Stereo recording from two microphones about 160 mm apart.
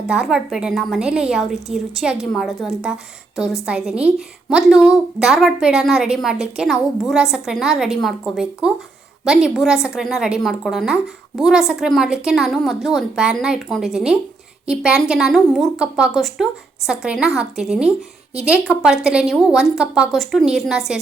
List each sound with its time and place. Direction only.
0.1 s a woman's voice: 5° right (ahead or behind)